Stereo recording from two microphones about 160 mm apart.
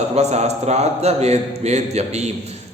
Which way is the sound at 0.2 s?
45° right (ahead or behind).